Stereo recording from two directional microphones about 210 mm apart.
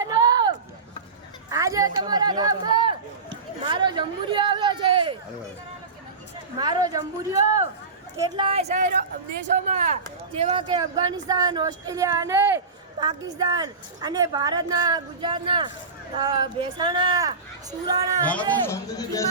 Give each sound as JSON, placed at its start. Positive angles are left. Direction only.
{"t": 0.0, "sound": "a sound", "side_deg": -20}
{"t": 1.5, "sound": "speech", "side_deg": -15}
{"t": 6.6, "sound": "a woman's voice", "side_deg": -20}
{"t": 18.3, "sound": "speech", "side_deg": 10}